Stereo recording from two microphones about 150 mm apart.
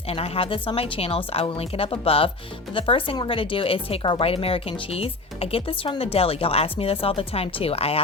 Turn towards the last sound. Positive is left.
turn(degrees=40)  # may be behind; listen again after turning